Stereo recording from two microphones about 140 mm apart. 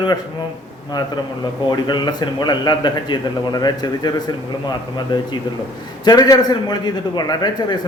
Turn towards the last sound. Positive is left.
turn(degrees=30)  # may be behind; listen again after turning